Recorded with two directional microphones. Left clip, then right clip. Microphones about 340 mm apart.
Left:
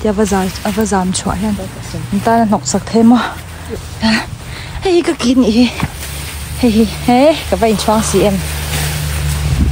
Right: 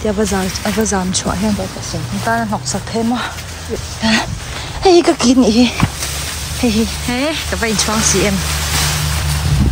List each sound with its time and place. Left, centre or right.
0.0 s speech: centre